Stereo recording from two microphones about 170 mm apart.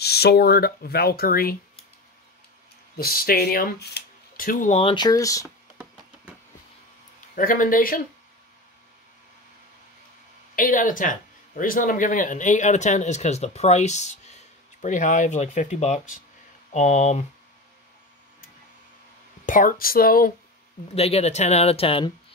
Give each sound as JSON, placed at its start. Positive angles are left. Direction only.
{"t": 0.0, "sound": "speech", "side_deg": 70}
{"t": 3.0, "sound": "speech", "side_deg": 60}
{"t": 4.9, "sound": "speech", "side_deg": 20}
{"t": 7.3, "sound": "speech", "side_deg": 55}
{"t": 10.5, "sound": "speech", "side_deg": 55}
{"t": 19.4, "sound": "speech", "side_deg": 50}
{"t": 20.9, "sound": "speech", "side_deg": 35}